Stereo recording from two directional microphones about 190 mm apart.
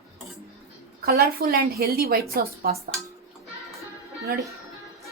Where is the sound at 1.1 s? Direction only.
55° right (ahead or behind).